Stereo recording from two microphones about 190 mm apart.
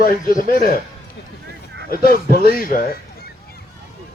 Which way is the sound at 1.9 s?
50° left (ahead or behind).